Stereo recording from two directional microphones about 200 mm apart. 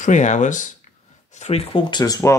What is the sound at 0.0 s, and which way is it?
Speech, 40° left (ahead or behind).